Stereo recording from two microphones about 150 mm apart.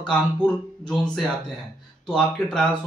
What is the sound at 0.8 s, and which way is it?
Speech, 5° left (ahead or behind).